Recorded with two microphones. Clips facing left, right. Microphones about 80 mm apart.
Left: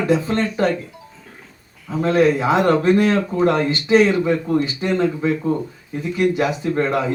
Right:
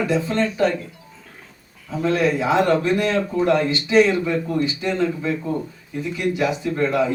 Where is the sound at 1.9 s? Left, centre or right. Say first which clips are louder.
Left 4 dB; left.